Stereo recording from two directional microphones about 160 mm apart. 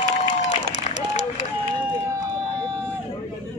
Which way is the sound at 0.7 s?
45° left (ahead or behind).